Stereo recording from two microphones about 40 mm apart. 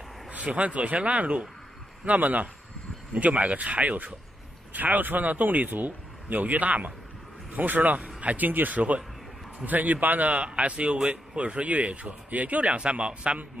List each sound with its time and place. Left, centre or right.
0.3 s speech: right
2.0 s speech: right